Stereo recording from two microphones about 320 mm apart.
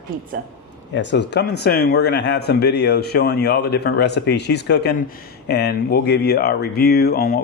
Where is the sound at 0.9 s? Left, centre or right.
Left.